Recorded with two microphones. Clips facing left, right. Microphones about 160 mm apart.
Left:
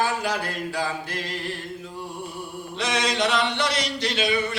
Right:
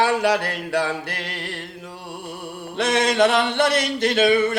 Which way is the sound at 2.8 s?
55° right (ahead or behind).